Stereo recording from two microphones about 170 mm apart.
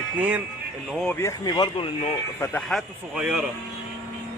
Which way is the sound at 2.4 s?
10° left (ahead or behind).